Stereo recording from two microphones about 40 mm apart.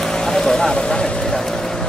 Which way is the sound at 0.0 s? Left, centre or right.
Centre.